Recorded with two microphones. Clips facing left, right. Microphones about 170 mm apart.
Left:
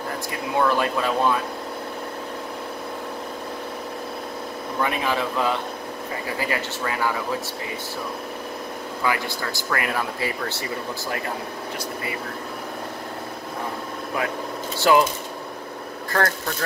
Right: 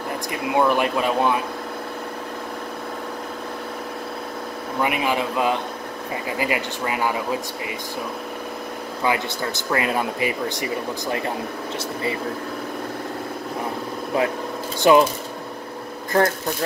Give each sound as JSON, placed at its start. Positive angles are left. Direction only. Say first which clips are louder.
{"t": 0.6, "sound": "speech", "louder": "right 2 dB", "side_deg": -20}
{"t": 4.8, "sound": "speech", "louder": "right 2 dB", "side_deg": -15}
{"t": 9.0, "sound": "speech", "louder": "right 3 dB", "side_deg": -20}
{"t": 14.8, "sound": "speech", "louder": "right 3 dB", "side_deg": -20}
{"t": 16.1, "sound": "speech", "louder": "right 4 dB", "side_deg": -20}